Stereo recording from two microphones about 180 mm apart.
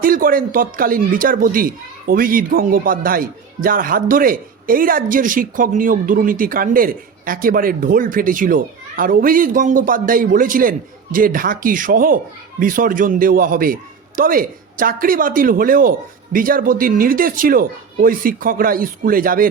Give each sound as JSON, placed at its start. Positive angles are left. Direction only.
{"t": 0.0, "sound": "speech", "side_deg": -50}